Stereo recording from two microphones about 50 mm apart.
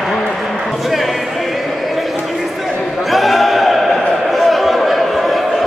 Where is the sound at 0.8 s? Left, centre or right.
Centre.